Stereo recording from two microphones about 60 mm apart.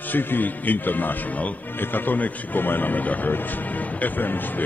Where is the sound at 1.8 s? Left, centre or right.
Left.